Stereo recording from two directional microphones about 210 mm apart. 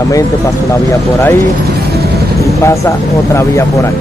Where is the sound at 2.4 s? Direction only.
15° left (ahead or behind).